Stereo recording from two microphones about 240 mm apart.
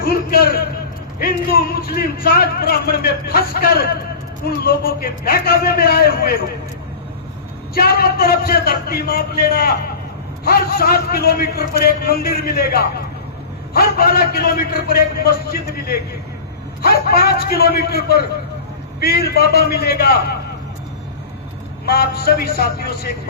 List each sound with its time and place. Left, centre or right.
0.0 s speech: left
7.7 s speech: left
16.8 s speech: left
21.8 s speech: left